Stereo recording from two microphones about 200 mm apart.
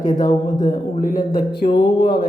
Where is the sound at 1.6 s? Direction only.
25° left (ahead or behind).